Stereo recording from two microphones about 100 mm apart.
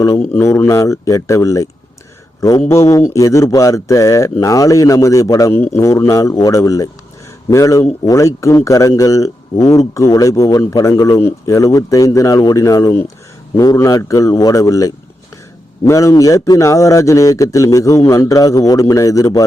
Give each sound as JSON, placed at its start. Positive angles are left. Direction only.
{"t": 0.2, "sound": "a man's voice", "side_deg": 25}